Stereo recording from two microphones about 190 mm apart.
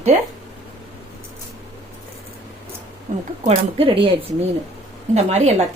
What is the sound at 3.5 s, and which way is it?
Speech, 30° right (ahead or behind).